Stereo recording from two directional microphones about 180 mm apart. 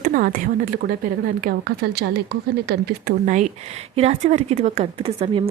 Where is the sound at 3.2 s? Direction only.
45° right (ahead or behind).